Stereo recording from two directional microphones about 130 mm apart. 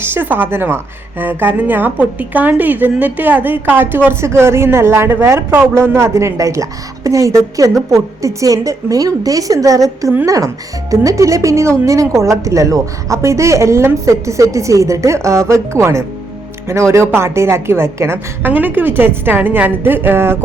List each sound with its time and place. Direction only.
0.0 s a woman's voice: 15° right (ahead or behind)